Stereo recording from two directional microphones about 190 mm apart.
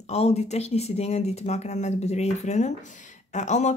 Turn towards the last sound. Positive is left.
turn(degrees=35)  # may be behind; listen again after turning